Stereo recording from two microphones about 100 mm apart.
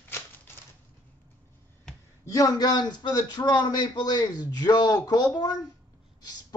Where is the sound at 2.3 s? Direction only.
35° left (ahead or behind).